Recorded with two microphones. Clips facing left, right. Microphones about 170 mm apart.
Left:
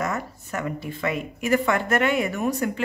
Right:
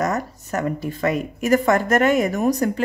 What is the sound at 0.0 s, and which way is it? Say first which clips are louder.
A woman's voice: right 5 dB; 40° right (ahead or behind).